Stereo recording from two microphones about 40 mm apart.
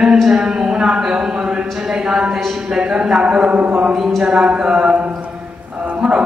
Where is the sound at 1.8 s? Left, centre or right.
Centre.